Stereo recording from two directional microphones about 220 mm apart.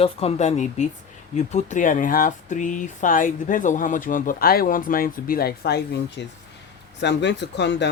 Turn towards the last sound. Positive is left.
turn(degrees=50)  # may be behind; listen again after turning